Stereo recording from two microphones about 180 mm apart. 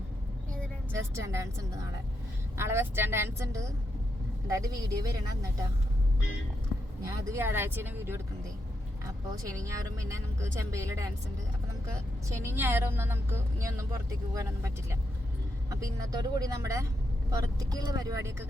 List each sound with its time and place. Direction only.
1.1 s speech: 15° right (ahead or behind)
7.0 s speech: 15° right (ahead or behind)
12.4 s speech: 10° right (ahead or behind)